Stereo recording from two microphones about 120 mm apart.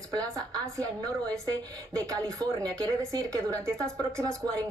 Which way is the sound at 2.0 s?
30° right (ahead or behind).